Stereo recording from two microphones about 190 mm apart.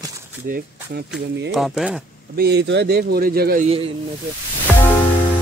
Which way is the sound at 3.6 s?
30° right (ahead or behind).